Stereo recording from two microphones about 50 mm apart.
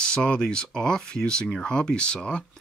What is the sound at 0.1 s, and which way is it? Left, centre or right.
Speech, centre.